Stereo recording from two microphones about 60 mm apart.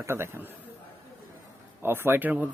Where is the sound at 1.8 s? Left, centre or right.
Right.